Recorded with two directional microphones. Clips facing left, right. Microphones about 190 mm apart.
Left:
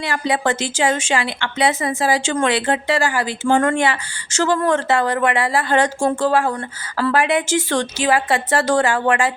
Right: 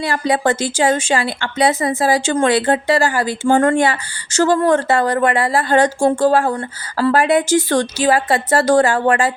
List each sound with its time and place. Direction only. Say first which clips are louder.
0.0 s a woman's voice: right 3 dB; 35° right (ahead or behind)